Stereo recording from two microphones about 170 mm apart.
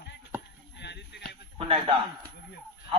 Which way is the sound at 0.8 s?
90° left.